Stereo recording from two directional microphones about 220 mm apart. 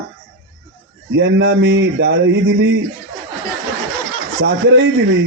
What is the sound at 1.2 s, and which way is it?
Speech, 55° right (ahead or behind).